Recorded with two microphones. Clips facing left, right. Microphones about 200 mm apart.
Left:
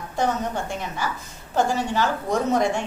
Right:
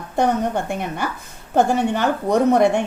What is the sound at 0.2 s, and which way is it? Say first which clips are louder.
A woman's voice: right 5 dB; 55° right (ahead or behind).